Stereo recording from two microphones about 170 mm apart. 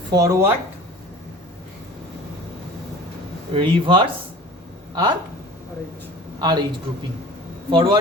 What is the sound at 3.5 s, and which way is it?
Speech, 30° right (ahead or behind).